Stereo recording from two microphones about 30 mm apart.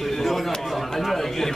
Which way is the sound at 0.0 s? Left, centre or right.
Centre.